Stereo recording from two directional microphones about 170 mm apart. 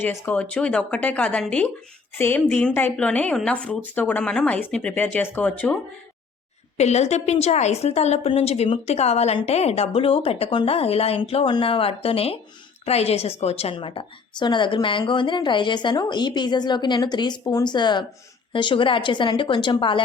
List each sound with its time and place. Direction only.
0.0 s a woman's voice: 15° left (ahead or behind)
6.7 s a woman's voice: 40° left (ahead or behind)